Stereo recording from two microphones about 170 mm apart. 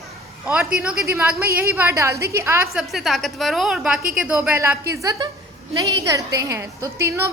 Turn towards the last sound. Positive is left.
turn(degrees=-15)  # may be behind; listen again after turning